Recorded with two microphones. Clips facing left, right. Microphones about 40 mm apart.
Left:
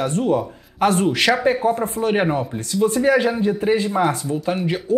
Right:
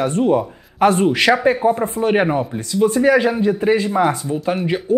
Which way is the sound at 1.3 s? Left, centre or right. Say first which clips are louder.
Right 4 dB; centre.